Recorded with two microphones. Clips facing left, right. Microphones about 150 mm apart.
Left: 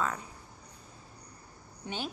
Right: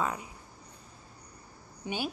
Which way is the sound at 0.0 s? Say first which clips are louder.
Right 1 dB; 15° right (ahead or behind).